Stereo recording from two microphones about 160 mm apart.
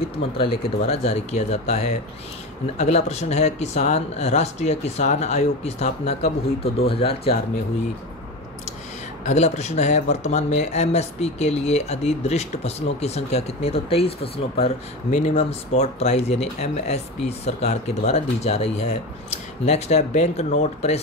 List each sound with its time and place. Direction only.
0.4 s speech: 40° left (ahead or behind)
9.2 s speech: 45° left (ahead or behind)